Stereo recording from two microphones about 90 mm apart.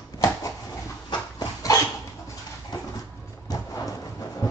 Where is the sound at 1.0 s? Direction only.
40° left (ahead or behind).